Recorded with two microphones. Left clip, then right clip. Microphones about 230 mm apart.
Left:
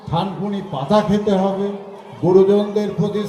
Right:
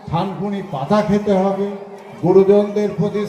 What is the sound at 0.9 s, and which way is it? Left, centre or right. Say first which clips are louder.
Speech: even; left.